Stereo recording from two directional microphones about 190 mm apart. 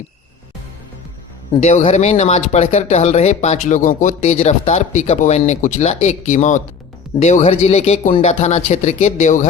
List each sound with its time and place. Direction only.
1.6 s speech: 35° left (ahead or behind)